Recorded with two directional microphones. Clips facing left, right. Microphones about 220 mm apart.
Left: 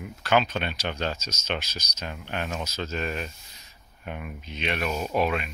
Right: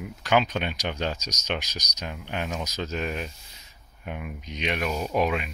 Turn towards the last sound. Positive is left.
turn(degrees=-10)  # may be behind; listen again after turning